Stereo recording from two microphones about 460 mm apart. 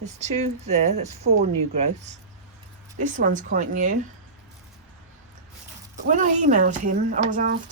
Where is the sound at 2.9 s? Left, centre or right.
Centre.